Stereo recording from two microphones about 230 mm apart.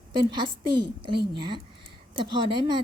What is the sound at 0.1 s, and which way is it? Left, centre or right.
A woman's voice, centre.